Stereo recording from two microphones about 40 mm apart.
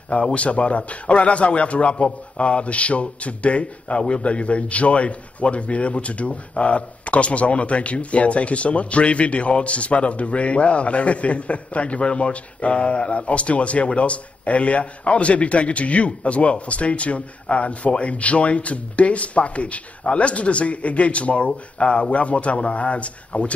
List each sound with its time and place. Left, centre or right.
0.1 s a man's voice: left